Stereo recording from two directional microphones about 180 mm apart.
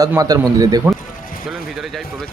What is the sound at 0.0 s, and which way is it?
Speech, 20° right (ahead or behind).